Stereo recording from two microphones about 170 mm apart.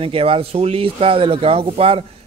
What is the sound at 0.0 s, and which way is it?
Speech, 35° right (ahead or behind).